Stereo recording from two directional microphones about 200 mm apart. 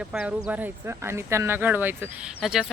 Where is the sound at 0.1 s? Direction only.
5° right (ahead or behind).